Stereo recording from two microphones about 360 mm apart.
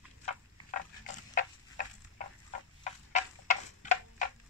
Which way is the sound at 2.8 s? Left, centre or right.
Centre.